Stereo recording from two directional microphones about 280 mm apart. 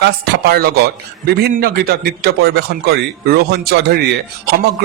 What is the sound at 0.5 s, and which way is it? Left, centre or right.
A man's voice, right.